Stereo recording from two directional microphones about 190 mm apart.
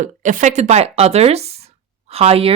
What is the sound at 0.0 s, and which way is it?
Speech, 45° right (ahead or behind).